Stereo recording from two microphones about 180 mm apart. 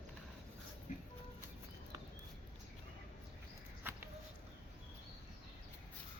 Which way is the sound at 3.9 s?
10° right (ahead or behind).